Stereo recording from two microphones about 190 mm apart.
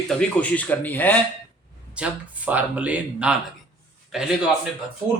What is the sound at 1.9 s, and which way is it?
Speech, 5° right (ahead or behind).